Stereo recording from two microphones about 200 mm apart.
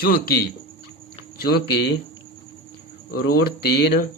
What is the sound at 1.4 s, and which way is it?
Speech, 55° left (ahead or behind).